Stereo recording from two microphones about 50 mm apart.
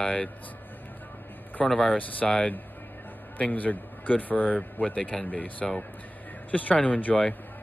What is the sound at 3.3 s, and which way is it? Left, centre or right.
A man's voice, left.